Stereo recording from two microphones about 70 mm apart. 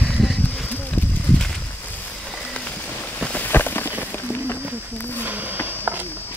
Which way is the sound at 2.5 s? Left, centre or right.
Centre.